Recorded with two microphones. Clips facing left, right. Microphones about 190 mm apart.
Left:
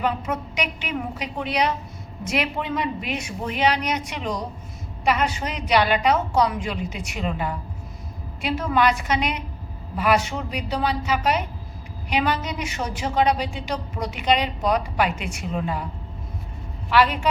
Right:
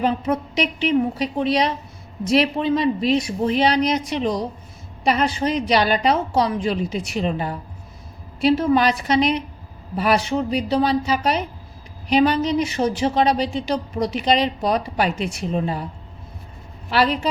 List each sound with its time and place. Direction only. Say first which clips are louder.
0.0 s a woman's voice: right 5 dB; 35° right (ahead or behind)
16.9 s a woman's voice: even; 35° right (ahead or behind)